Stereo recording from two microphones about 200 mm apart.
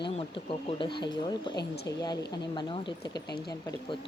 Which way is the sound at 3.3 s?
55° left (ahead or behind).